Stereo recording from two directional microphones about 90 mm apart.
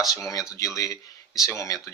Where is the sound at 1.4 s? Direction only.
35° left (ahead or behind).